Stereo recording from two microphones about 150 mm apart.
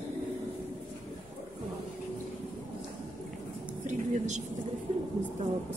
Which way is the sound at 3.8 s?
50° right (ahead or behind).